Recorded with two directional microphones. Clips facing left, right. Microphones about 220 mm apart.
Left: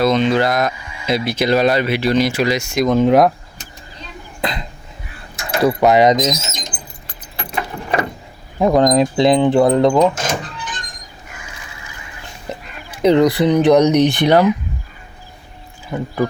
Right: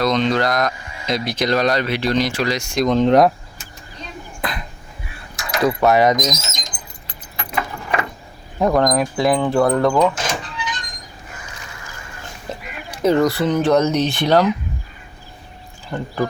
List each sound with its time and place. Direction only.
0.0 s speech: 5° left (ahead or behind)
4.4 s a sound: 20° left (ahead or behind)
5.6 s speech: 15° left (ahead or behind)
7.3 s keys jangling: 30° left (ahead or behind)
8.5 s speech: 15° left (ahead or behind)
10.2 s music: 45° left (ahead or behind)
13.0 s speech: 15° left (ahead or behind)
15.9 s speech: 5° left (ahead or behind)